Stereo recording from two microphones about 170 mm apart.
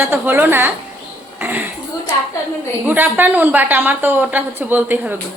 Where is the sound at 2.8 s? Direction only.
10° right (ahead or behind).